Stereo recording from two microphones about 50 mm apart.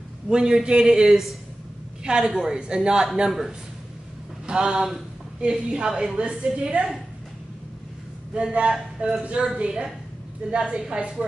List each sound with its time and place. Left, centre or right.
0.3 s a woman's voice: centre
8.4 s a woman's voice: right